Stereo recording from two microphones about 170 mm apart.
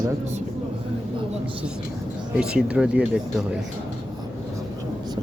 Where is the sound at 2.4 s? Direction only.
5° right (ahead or behind).